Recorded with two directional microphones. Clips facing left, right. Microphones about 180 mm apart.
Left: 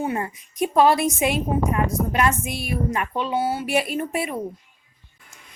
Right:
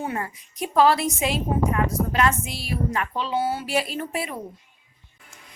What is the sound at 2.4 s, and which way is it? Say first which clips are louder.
Speech: left 4 dB; 55° left (ahead or behind).